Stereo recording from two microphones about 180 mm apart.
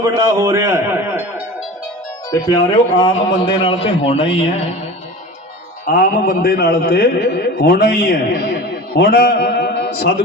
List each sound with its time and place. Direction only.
0.0 s a man's voice: 20° right (ahead or behind)
3.0 s a man's voice: 25° left (ahead or behind)
5.8 s a man's voice: 55° left (ahead or behind)